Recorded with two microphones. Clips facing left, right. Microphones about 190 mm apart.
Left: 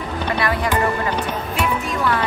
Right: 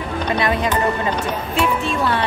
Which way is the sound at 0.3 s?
20° right (ahead or behind).